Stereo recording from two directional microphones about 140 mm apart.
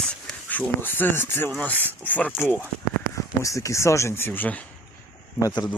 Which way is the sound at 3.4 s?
25° left (ahead or behind).